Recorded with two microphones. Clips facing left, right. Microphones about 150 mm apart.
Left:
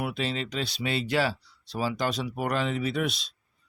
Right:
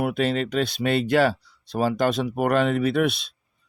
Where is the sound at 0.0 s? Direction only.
55° right (ahead or behind).